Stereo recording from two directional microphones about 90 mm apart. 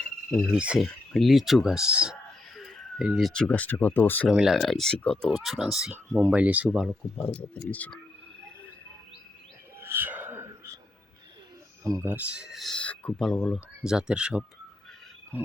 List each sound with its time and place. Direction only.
0.3 s speech: centre (ahead or behind)
2.6 s a sound: 5° right (ahead or behind)
3.3 s speech: 10° left (ahead or behind)
4.3 s speech: 5° right (ahead or behind)
5.9 s speech: 15° right (ahead or behind)
6.8 s speech: 5° left (ahead or behind)
7.7 s speech: 15° left (ahead or behind)
9.8 s a sound: 25° right (ahead or behind)
11.8 s speech: 40° right (ahead or behind)
12.0 s speech: 15° right (ahead or behind)
12.7 s speech: 15° left (ahead or behind)
13.1 s speech: centre (ahead or behind)